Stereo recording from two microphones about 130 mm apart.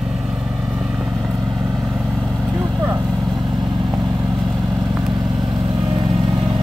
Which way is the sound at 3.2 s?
Centre (ahead or behind).